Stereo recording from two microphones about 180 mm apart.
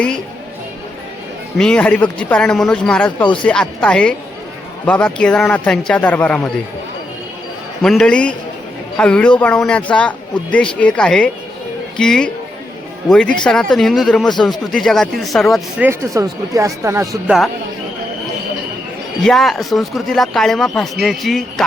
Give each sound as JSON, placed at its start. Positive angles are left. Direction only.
{"t": 1.5, "sound": "a man's voice", "side_deg": 5}
{"t": 7.8, "sound": "a man's voice", "side_deg": 0}
{"t": 15.8, "sound": "speech", "side_deg": -15}
{"t": 17.2, "sound": "a man's voice", "side_deg": 0}
{"t": 19.2, "sound": "a man's voice", "side_deg": 0}